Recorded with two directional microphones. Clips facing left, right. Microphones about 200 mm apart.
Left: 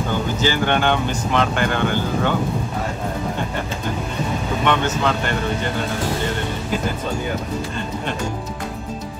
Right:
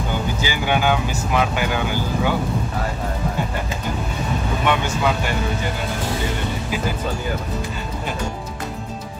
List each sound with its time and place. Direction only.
0.4 s speech: 10° right (ahead or behind)
4.6 s speech: 10° right (ahead or behind)